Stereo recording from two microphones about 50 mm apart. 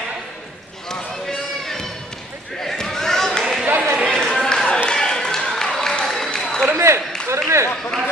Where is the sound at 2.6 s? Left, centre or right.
Centre.